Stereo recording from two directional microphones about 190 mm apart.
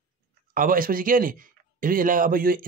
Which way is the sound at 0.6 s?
45° right (ahead or behind).